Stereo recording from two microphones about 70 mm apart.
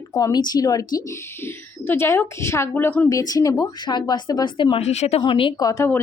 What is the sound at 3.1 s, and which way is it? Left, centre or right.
Speech, left.